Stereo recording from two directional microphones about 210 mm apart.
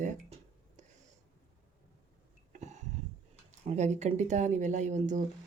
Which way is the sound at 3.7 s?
30° right (ahead or behind).